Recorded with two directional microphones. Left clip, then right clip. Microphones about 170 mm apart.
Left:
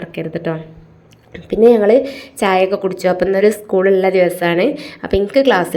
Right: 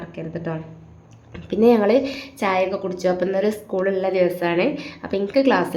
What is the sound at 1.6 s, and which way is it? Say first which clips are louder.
Speech: left 6 dB; 5° left (ahead or behind).